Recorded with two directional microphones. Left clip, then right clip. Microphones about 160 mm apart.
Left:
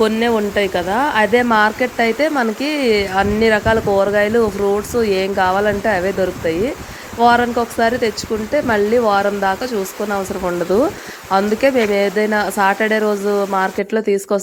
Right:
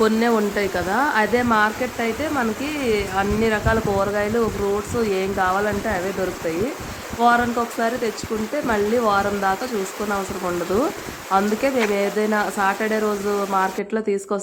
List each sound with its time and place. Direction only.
0.0 s speech: 20° left (ahead or behind)
7.2 s speech: 25° left (ahead or behind)